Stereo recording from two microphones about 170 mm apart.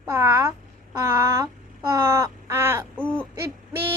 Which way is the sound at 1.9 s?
15° right (ahead or behind).